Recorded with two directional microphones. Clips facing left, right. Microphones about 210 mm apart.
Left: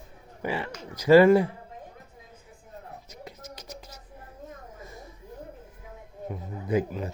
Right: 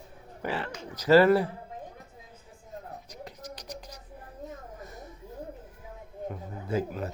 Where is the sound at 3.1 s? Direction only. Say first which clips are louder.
Right 1 dB; 10° left (ahead or behind).